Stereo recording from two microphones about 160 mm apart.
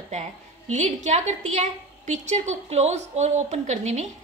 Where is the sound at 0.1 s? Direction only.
45° right (ahead or behind).